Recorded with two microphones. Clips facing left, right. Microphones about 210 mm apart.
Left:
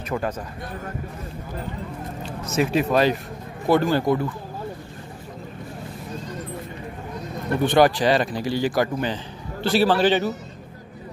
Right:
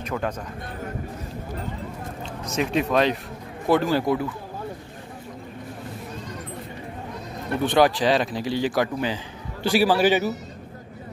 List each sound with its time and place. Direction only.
0.1 s speech: 15° left (ahead or behind)
2.5 s speech: 5° left (ahead or behind)
7.6 s speech: centre (ahead or behind)